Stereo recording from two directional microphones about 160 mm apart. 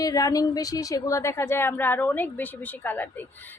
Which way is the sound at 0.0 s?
20° left (ahead or behind).